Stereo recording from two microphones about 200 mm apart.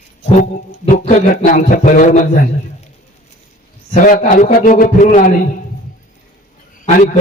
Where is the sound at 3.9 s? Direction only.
40° left (ahead or behind).